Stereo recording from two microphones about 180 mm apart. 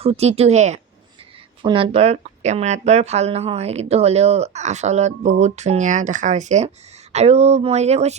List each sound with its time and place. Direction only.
0.0 s speech: 35° right (ahead or behind)